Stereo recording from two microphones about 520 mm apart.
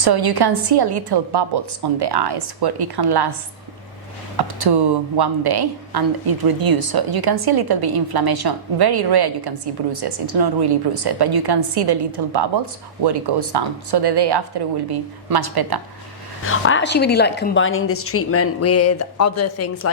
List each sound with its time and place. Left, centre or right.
0.0 s speech: right
4.4 s speech: right
16.5 s a woman's voice: left